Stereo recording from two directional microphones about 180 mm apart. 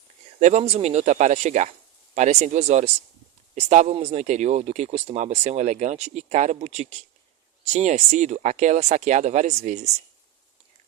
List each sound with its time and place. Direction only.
0.3 s speech: 40° right (ahead or behind)